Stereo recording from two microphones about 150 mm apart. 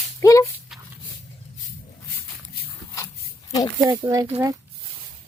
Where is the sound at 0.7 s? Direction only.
Centre (ahead or behind).